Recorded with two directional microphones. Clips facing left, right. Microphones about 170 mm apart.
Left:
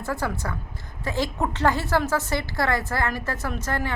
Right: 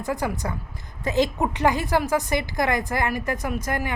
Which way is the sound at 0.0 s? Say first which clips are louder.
Right 2 dB; 15° right (ahead or behind).